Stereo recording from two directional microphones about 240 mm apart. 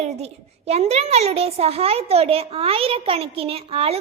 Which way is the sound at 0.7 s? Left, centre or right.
Right.